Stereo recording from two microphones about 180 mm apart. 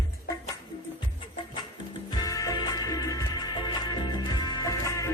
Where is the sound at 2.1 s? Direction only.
20° left (ahead or behind).